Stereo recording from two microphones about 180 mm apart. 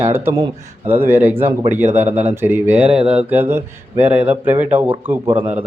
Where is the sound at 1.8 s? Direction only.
35° right (ahead or behind).